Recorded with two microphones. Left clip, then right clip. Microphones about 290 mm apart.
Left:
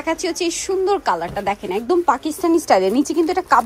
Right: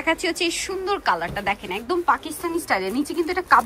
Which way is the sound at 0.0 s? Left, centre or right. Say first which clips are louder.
Left 1 dB; centre.